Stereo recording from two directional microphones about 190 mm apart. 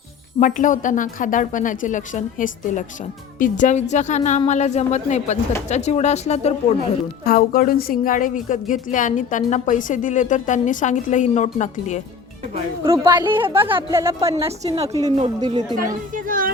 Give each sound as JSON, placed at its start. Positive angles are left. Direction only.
{"t": 0.3, "sound": "a woman's voice", "side_deg": 45}
{"t": 7.3, "sound": "a woman's voice", "side_deg": 50}
{"t": 12.9, "sound": "a woman's voice", "side_deg": -15}
{"t": 16.1, "sound": "speech", "side_deg": -45}